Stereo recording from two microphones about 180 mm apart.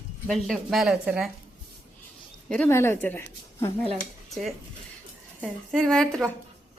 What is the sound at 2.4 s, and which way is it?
Speech, 5° left (ahead or behind).